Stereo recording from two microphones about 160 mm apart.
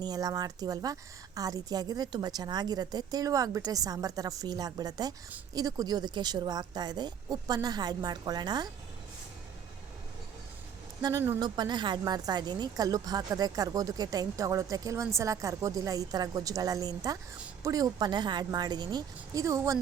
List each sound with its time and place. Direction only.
0.0 s speech: 25° right (ahead or behind)
11.0 s speech: 15° right (ahead or behind)
11.3 s speech: 25° right (ahead or behind)